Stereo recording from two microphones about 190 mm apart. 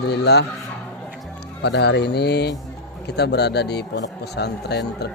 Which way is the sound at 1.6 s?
65° left (ahead or behind).